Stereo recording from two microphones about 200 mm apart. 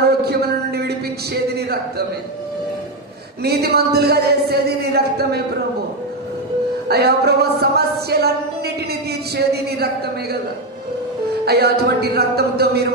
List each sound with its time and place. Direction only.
0.0 s a sound: 55° right (ahead or behind)
3.4 s speech: 50° right (ahead or behind)
6.9 s speech: 55° right (ahead or behind)
11.4 s speech: 50° right (ahead or behind)